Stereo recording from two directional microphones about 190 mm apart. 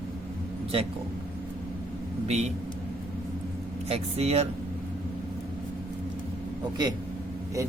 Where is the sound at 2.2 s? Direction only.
35° right (ahead or behind).